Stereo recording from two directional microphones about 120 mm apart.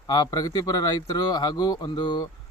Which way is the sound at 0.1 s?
30° left (ahead or behind).